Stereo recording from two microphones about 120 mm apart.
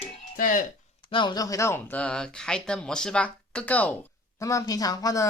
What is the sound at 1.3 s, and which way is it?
Speech, 30° left (ahead or behind).